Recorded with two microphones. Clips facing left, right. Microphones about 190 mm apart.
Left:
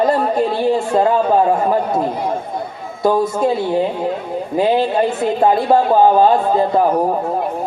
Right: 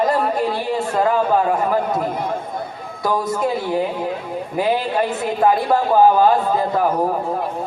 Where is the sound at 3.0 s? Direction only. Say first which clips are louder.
Left 5 dB; 25° left (ahead or behind).